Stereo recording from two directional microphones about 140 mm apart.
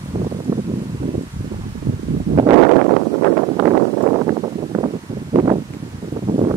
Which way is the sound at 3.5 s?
35° right (ahead or behind).